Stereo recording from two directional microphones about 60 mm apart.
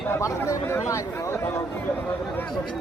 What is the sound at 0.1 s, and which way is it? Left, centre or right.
Speech, left.